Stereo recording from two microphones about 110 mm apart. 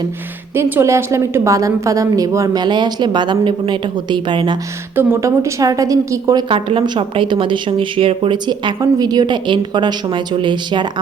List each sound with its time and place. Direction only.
0.5 s a woman's voice: 25° right (ahead or behind); by 4.5 s 45° right (ahead or behind)
4.9 s a woman's voice: 25° right (ahead or behind)
6.5 s speech: 50° right (ahead or behind)